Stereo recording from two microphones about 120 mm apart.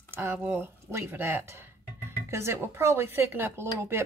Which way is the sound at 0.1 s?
20° right (ahead or behind).